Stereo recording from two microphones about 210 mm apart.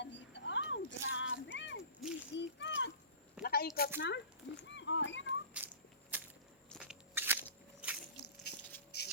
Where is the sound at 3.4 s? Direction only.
45° left (ahead or behind).